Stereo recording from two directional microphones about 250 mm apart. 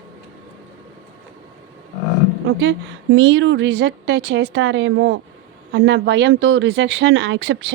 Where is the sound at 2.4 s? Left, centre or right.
Right.